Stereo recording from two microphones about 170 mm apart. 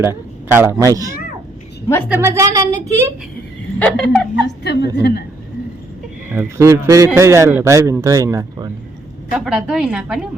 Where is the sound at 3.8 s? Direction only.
5° left (ahead or behind).